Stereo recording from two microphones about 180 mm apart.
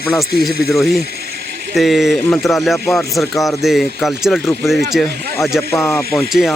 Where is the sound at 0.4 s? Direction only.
Centre (ahead or behind).